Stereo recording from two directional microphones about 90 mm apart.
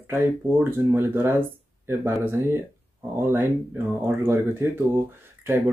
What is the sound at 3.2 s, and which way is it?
Speech, 25° right (ahead or behind).